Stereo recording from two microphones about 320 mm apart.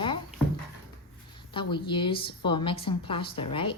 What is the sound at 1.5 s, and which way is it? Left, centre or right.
A woman's voice, centre.